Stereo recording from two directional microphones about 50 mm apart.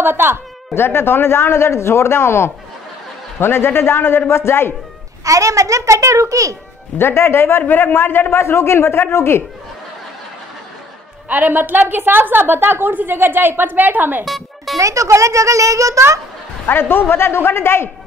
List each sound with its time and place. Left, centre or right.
0.0 s a woman's voice: right
0.7 s a man's voice: left
5.2 s a child's voice: right
7.0 s a man's voice: left
11.2 s a woman's voice: right
14.2 s speech: centre
14.8 s a child's voice: right
16.6 s a man's voice: left